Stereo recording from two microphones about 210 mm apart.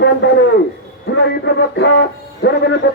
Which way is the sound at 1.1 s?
55° left (ahead or behind).